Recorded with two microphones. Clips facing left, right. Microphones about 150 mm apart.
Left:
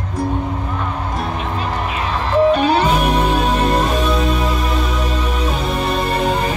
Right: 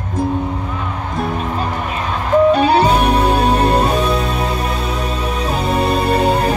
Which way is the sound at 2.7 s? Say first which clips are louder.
Right 2 dB; 35° right (ahead or behind).